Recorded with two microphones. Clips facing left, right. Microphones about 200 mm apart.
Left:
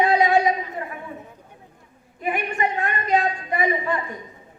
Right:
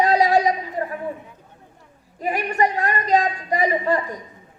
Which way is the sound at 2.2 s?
40° right (ahead or behind).